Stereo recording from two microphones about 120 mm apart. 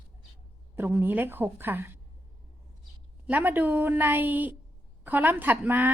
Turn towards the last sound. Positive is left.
turn(degrees=-15)  # may be behind; listen again after turning